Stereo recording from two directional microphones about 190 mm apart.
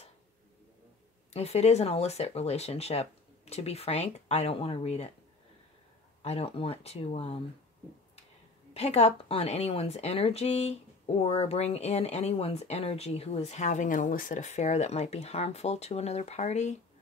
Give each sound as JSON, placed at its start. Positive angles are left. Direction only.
{"t": 1.3, "sound": "speech", "side_deg": 35}
{"t": 6.2, "sound": "speech", "side_deg": 30}
{"t": 8.7, "sound": "speech", "side_deg": 30}